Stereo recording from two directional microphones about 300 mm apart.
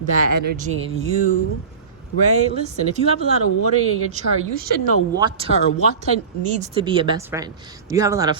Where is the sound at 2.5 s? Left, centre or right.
Right.